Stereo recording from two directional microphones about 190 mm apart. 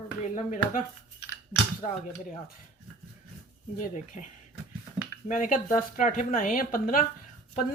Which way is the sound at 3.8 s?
40° left (ahead or behind).